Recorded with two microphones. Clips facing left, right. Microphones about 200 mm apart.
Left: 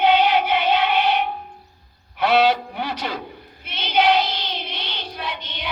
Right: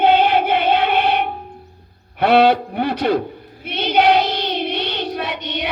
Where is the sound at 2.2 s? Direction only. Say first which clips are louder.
Right 4 dB; 60° right (ahead or behind).